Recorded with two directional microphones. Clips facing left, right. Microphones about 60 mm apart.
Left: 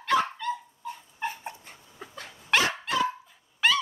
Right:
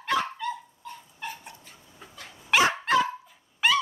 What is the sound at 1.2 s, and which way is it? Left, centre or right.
Dog, left.